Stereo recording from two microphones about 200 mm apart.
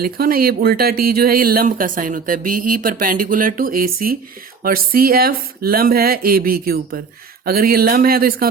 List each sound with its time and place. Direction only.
0.0 s speech: 50° right (ahead or behind)